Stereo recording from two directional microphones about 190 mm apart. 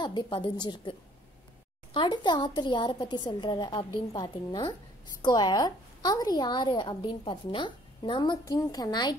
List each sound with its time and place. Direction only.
0.0 s a woman's voice: 25° left (ahead or behind)
2.0 s a woman's voice: 20° left (ahead or behind)